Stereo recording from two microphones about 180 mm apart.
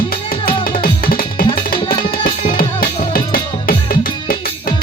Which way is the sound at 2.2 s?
50° left (ahead or behind).